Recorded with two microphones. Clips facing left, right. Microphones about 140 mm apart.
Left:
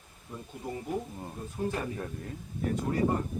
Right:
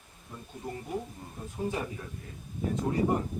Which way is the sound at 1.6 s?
5° right (ahead or behind).